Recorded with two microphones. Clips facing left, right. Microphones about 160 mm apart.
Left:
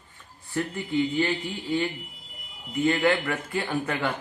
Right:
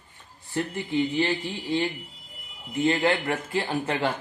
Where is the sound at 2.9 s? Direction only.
30° right (ahead or behind).